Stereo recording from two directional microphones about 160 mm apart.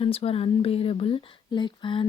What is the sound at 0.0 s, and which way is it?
Speech, 35° left (ahead or behind).